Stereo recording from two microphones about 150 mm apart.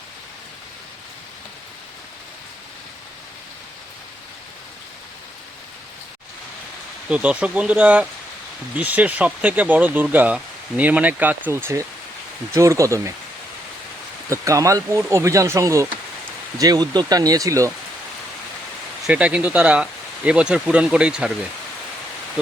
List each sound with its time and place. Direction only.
7.1 s speech: 10° right (ahead or behind)
14.3 s speech: 20° right (ahead or behind)
19.0 s speech: 10° right (ahead or behind)